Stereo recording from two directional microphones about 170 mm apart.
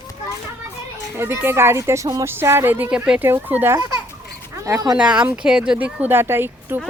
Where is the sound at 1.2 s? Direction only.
15° right (ahead or behind).